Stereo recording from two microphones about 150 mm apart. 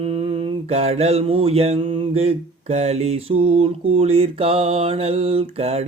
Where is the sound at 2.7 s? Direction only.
45° right (ahead or behind).